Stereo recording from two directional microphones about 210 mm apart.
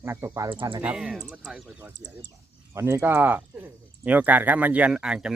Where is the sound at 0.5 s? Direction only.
25° right (ahead or behind).